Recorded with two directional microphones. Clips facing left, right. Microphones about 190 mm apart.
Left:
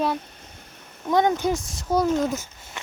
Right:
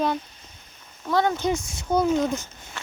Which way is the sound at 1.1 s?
20° left (ahead or behind).